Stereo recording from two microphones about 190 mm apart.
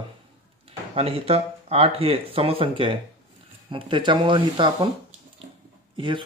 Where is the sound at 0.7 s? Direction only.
30° right (ahead or behind).